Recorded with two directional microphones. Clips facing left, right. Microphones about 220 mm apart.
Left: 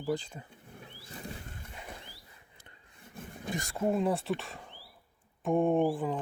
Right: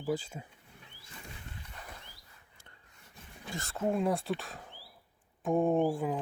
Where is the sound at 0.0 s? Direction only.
5° right (ahead or behind).